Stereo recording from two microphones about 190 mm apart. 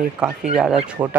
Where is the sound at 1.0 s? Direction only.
15° right (ahead or behind).